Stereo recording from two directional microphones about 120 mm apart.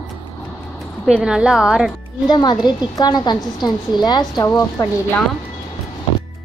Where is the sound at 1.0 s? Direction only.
5° right (ahead or behind).